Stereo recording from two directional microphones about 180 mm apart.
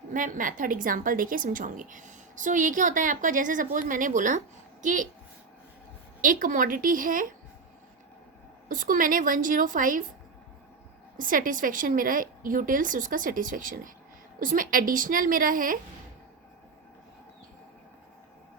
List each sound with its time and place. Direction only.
0.1 s a woman's voice: 50° right (ahead or behind)
6.2 s a woman's voice: 50° right (ahead or behind)
8.7 s a woman's voice: 50° right (ahead or behind)
11.2 s a woman's voice: 50° right (ahead or behind)